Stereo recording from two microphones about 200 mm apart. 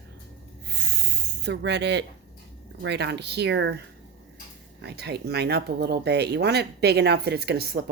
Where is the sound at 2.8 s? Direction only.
60° right (ahead or behind).